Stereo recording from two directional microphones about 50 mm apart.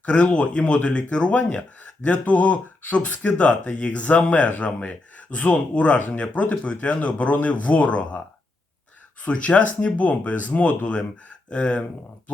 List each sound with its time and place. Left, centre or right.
0.0 s speech: left
9.2 s speech: left